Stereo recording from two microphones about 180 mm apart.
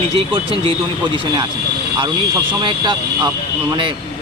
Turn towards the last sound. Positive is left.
turn(degrees=-25)  # may be behind; listen again after turning